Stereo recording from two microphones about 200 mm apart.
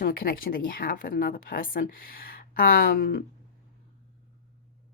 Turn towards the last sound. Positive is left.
turn(degrees=50)  # may be behind; listen again after turning